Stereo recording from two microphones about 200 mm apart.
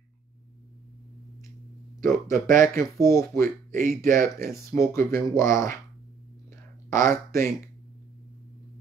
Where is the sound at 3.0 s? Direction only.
15° left (ahead or behind).